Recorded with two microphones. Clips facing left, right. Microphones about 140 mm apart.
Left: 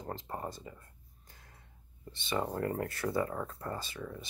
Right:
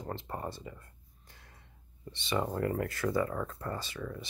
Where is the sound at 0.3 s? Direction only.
20° left (ahead or behind).